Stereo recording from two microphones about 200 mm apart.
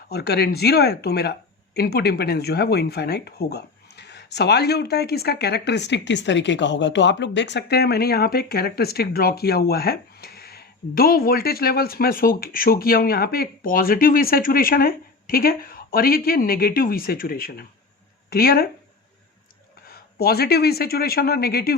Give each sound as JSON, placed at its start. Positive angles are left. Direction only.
{"t": 0.1, "sound": "speech", "side_deg": 55}
{"t": 19.9, "sound": "speech", "side_deg": 50}